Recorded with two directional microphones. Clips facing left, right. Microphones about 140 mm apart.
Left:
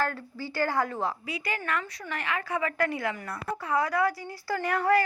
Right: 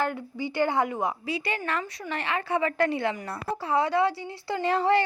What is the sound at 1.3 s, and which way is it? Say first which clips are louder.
A woman's voice: right 2 dB; 25° right (ahead or behind).